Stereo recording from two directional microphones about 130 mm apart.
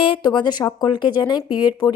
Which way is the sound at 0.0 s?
40° left (ahead or behind).